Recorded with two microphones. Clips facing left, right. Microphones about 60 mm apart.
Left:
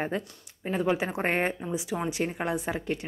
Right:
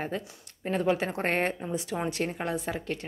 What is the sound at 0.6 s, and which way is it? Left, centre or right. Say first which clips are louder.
Speech: even; centre.